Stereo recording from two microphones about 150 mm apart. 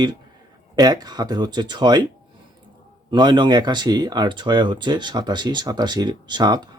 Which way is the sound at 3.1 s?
30° right (ahead or behind).